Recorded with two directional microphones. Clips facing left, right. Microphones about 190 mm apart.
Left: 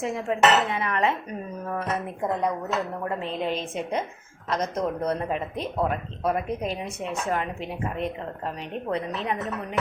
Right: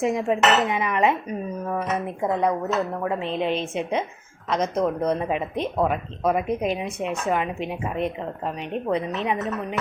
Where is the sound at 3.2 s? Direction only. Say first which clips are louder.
Right 3 dB; 40° left (ahead or behind).